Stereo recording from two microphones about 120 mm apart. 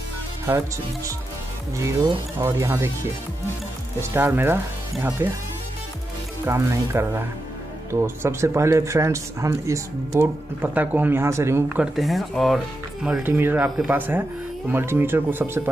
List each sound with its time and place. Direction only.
0.5 s speech: 25° right (ahead or behind)
2.4 s speech: 25° right (ahead or behind)
4.0 s speech: 20° right (ahead or behind)
6.4 s speech: 20° right (ahead or behind)
11.7 s speech: 5° right (ahead or behind)
13.2 s speech: 15° right (ahead or behind)